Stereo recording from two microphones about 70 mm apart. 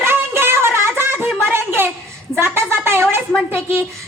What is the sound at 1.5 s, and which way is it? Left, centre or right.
A woman's voice, right.